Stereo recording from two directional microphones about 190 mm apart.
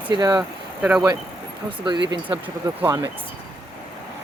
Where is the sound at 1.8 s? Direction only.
20° right (ahead or behind).